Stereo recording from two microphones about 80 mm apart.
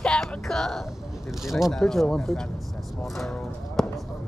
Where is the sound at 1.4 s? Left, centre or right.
Centre.